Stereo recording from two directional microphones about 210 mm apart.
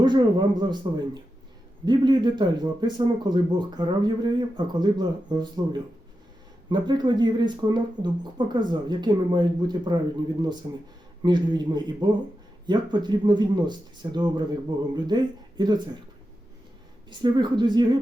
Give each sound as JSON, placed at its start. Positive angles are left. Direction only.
{"t": 0.0, "sound": "a man's voice", "side_deg": -20}
{"t": 17.1, "sound": "a man's voice", "side_deg": -20}